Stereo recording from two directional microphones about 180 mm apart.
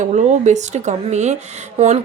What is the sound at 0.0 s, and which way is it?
Speech, 40° right (ahead or behind).